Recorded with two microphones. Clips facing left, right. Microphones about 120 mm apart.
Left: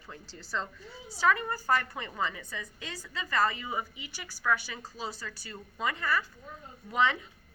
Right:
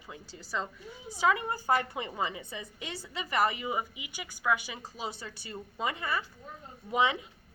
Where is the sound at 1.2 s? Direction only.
20° right (ahead or behind).